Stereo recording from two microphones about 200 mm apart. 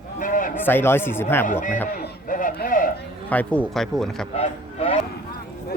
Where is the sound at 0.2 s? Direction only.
45° left (ahead or behind).